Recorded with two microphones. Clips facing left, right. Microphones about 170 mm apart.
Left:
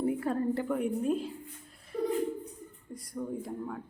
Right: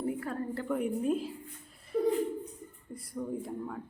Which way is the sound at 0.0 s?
20° left (ahead or behind).